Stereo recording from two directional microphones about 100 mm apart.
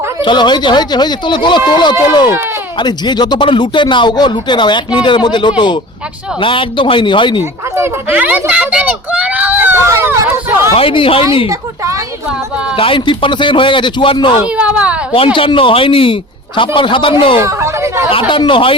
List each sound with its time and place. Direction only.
0.3 s a man's voice: 50° left (ahead or behind)
8.1 s a child's voice: 15° right (ahead or behind)
10.8 s a man's voice: 60° left (ahead or behind)
12.7 s a man's voice: 60° left (ahead or behind)
14.6 s a child's voice: 10° right (ahead or behind)
15.1 s a man's voice: 65° left (ahead or behind)
17.4 s speech: 30° right (ahead or behind)
18.1 s a man's voice: 65° left (ahead or behind)